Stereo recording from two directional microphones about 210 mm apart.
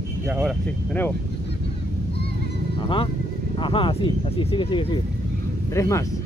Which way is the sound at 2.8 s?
25° left (ahead or behind).